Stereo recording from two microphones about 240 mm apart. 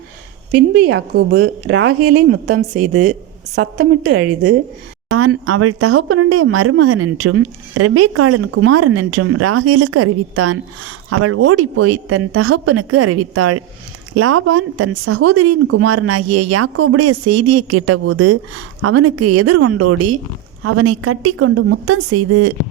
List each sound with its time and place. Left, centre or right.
0.5 s a woman's voice: right
2.1 s a woman's voice: right
3.5 s a woman's voice: right
5.1 s speech: right